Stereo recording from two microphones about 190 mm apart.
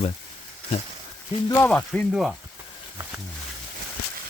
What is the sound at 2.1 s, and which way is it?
Speech, 5° right (ahead or behind).